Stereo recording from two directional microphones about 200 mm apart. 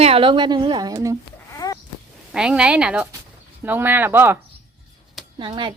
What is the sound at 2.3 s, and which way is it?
A woman's voice, 5° right (ahead or behind).